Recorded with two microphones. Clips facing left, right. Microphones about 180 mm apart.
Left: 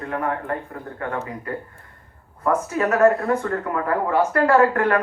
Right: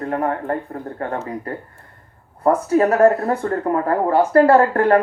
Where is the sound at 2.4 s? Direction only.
35° right (ahead or behind).